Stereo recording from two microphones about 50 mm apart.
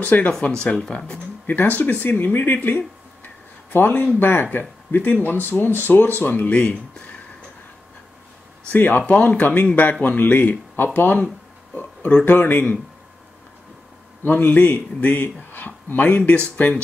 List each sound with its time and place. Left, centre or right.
0.0 s speech: left
0.3 s speech: centre
1.5 s speech: left
8.7 s speech: left
11.7 s a sound: left
12.3 s speech: left
14.2 s speech: left